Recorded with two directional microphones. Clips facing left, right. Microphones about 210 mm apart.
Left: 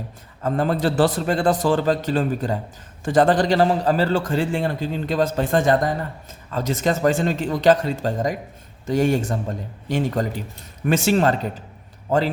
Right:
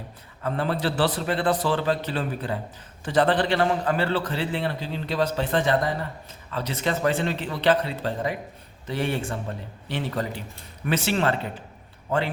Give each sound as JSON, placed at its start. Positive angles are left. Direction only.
{"t": 0.4, "sound": "a man's voice", "side_deg": 45}